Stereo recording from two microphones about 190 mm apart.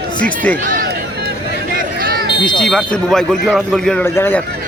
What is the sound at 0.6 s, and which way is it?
Run, 45° right (ahead or behind).